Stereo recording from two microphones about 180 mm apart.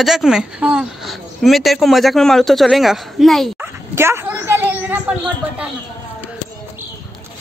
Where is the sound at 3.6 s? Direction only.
15° right (ahead or behind).